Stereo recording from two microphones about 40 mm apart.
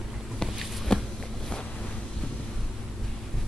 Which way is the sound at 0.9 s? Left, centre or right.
Left.